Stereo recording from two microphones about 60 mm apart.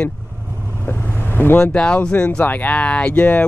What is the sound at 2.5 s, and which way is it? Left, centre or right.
Speech, left.